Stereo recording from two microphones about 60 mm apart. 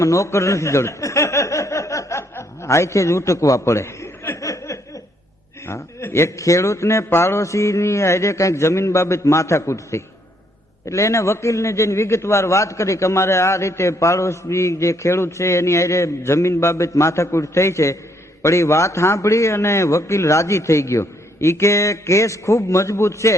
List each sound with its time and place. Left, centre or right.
0.0 s snicker: left
2.3 s a man's voice: left
3.6 s chuckle: left
4.4 s snicker: left
5.6 s a man's voice: left
7.4 s a man's voice: left